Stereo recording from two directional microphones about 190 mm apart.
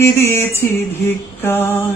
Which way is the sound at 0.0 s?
10° left (ahead or behind).